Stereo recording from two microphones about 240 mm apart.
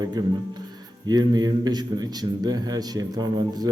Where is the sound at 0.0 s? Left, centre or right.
Centre.